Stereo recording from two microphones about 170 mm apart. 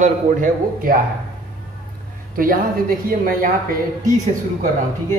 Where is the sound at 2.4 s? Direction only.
55° right (ahead or behind).